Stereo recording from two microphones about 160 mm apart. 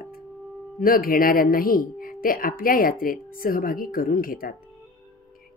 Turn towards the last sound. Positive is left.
turn(degrees=65)  # may be behind; listen again after turning